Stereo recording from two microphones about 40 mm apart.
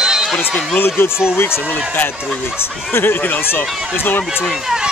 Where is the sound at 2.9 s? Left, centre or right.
Left.